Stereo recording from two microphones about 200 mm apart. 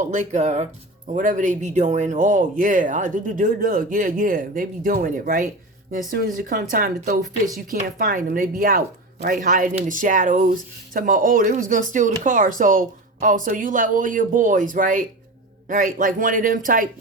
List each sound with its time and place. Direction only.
0.0 s speech: 35° right (ahead or behind)